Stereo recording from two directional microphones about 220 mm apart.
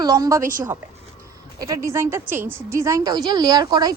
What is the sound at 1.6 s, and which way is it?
A woman's voice, 15° right (ahead or behind).